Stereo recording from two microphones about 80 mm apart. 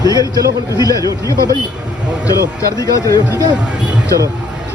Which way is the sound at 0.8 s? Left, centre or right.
Left.